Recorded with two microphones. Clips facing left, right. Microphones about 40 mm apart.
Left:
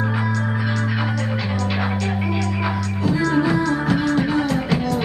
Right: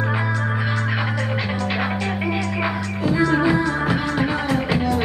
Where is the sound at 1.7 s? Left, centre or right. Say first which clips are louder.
Even; centre.